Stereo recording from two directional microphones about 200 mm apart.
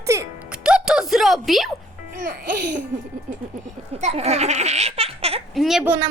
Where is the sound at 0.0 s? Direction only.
15° right (ahead or behind).